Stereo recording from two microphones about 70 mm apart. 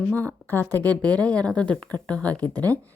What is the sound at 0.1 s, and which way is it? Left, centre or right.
Speech, left.